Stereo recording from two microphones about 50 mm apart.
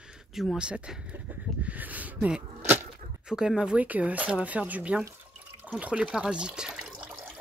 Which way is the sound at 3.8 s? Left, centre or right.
Right.